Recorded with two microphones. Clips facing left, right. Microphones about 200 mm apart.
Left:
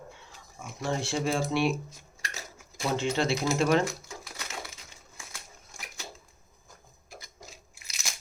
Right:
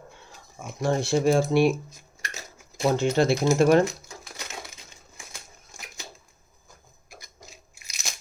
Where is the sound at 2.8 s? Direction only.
45° right (ahead or behind).